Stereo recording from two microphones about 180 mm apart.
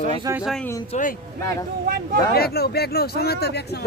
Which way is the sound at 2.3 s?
60° left (ahead or behind).